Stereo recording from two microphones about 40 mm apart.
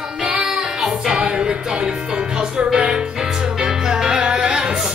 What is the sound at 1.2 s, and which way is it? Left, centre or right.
Music, right.